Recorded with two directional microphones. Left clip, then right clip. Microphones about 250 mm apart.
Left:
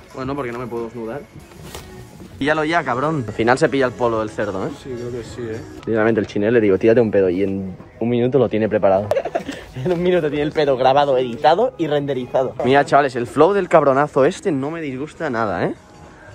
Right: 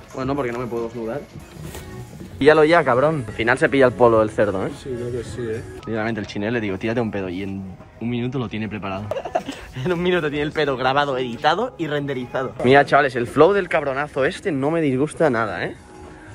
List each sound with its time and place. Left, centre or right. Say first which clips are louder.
0.1 s speech: right 1 dB; centre
2.4 s speech: right 5 dB; centre
3.3 s speech: left 2 dB; left
5.9 s speech: left 8 dB; centre
14.7 s speech: right 6 dB; centre
15.3 s speech: left 3 dB; left